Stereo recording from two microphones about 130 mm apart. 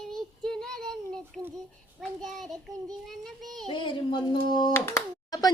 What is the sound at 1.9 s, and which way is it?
A child's voice, centre (ahead or behind).